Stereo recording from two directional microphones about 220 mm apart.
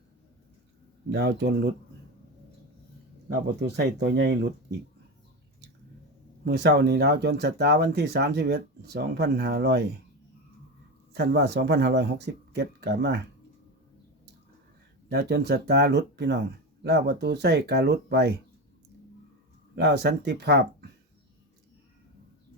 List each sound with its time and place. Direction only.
1.1 s speech: 50° right (ahead or behind)
4.0 s speech: 50° right (ahead or behind)
6.4 s speech: 50° right (ahead or behind)
11.1 s speech: 50° right (ahead or behind)
15.1 s speech: 50° right (ahead or behind)
19.7 s speech: 50° right (ahead or behind)